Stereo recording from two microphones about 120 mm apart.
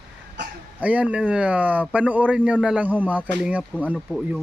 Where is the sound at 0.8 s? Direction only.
10° right (ahead or behind).